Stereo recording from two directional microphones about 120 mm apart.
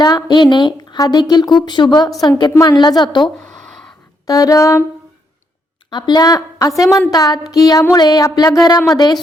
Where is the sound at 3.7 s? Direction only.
5° left (ahead or behind).